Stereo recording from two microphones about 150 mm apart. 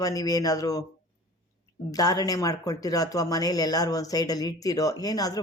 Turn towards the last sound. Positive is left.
turn(degrees=25)  # may be behind; listen again after turning